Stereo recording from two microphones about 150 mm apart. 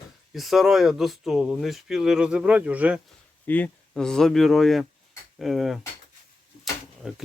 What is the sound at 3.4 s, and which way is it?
Speech, 10° left (ahead or behind).